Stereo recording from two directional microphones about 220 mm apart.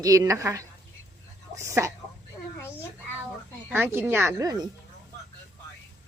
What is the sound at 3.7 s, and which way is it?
Speech, 10° right (ahead or behind).